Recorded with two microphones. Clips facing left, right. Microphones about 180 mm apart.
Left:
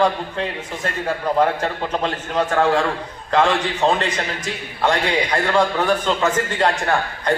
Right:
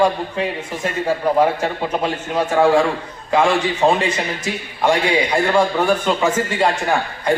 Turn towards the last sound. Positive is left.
turn(degrees=-10)  # may be behind; listen again after turning